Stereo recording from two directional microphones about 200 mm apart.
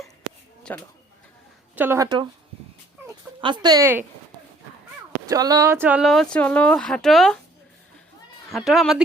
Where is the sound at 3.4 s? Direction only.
25° right (ahead or behind).